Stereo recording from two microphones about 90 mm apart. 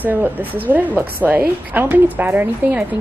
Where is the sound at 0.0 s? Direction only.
20° right (ahead or behind).